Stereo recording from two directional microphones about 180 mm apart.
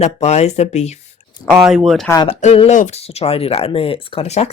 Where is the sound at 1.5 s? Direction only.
5° right (ahead or behind).